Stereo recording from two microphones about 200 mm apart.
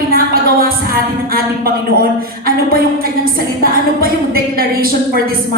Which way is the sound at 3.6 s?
50° right (ahead or behind).